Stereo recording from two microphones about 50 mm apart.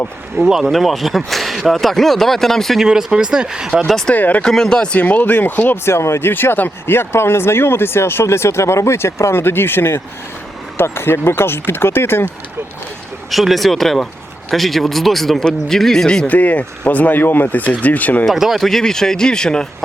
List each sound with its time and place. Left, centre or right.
0.6 s speech: centre
2.7 s speech: centre
3.8 s speech: centre
4.1 s speech: left
4.4 s speech: centre
4.9 s speech: left
5.7 s speech: left
13.3 s speech: centre
16.2 s speech: left
17.2 s speech: left
17.8 s speech: left
18.3 s speech: centre
18.6 s speech: centre